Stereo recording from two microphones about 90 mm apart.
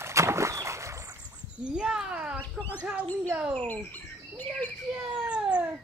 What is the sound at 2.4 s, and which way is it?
Speech, 20° left (ahead or behind).